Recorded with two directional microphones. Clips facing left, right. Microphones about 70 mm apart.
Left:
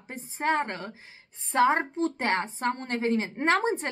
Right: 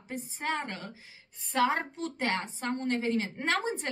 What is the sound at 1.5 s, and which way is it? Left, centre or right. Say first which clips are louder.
A woman's voice: left 5 dB; left.